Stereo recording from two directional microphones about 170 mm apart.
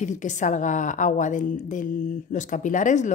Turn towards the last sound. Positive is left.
turn(degrees=45)  # may be behind; listen again after turning